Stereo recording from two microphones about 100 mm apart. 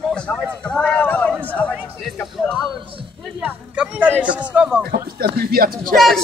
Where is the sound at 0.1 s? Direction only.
10° left (ahead or behind).